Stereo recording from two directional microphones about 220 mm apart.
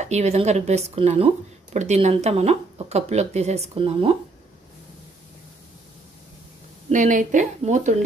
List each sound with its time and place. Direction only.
0.0 s speech: 30° right (ahead or behind)
6.9 s speech: 35° right (ahead or behind)